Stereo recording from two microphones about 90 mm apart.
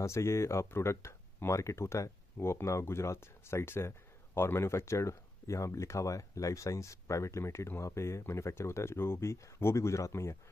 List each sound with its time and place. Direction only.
0.0 s speech: 30° left (ahead or behind)